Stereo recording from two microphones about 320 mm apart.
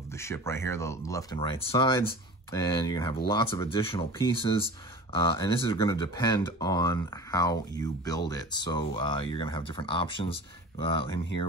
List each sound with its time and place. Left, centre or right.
0.1 s speech: centre